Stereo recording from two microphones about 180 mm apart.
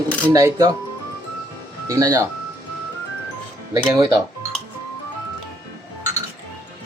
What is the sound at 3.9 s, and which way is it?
Speech, 20° right (ahead or behind).